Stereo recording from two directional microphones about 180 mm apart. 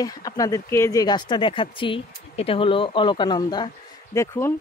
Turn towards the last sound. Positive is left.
turn(degrees=15)  # may be behind; listen again after turning